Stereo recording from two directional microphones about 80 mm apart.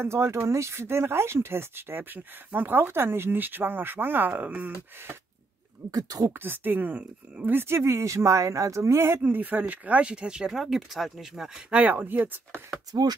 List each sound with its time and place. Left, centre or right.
0.0 s speech: right
5.9 s speech: right
6.3 s speech: right
9.2 s speech: right; by 11.6 s centre
11.7 s speech: right